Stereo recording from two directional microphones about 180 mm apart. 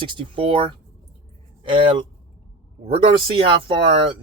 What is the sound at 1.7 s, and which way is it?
Speech, 30° right (ahead or behind).